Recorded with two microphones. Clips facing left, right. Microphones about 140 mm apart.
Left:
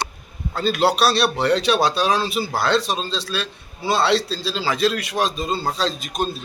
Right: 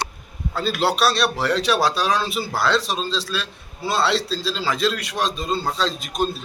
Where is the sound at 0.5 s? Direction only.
Centre (ahead or behind).